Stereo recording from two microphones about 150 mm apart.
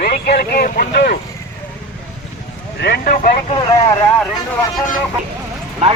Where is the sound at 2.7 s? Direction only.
90° left; by 3.3 s 70° left (ahead or behind).